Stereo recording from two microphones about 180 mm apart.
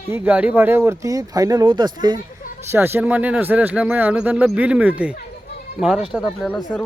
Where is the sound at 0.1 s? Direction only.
10° right (ahead or behind).